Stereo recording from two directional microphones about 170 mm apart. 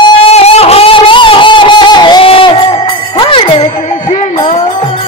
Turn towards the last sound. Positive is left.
turn(degrees=40)  # may be behind; listen again after turning